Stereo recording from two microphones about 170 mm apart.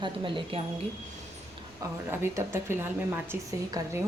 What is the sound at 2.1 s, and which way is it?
A woman's voice, 15° right (ahead or behind).